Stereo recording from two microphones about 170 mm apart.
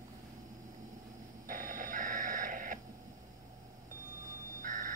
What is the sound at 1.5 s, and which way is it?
Radio, 55° right (ahead or behind).